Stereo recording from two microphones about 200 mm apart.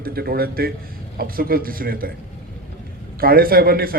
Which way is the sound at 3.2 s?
45° right (ahead or behind).